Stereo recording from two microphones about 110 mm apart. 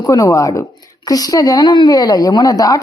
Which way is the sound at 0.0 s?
30° left (ahead or behind).